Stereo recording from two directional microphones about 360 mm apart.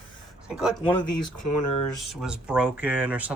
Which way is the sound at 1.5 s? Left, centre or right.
Left.